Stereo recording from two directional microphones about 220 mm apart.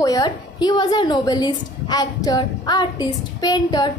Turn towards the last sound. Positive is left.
turn(degrees=15)  # may be behind; listen again after turning